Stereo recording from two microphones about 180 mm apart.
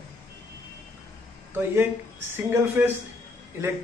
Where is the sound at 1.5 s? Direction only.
10° right (ahead or behind).